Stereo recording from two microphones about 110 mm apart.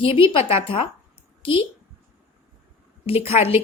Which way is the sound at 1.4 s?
55° left (ahead or behind).